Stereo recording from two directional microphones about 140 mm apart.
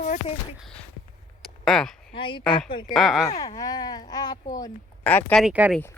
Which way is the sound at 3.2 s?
25° left (ahead or behind).